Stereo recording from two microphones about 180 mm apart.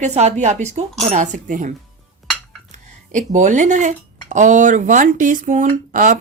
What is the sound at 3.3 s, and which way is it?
Speech, 45° right (ahead or behind).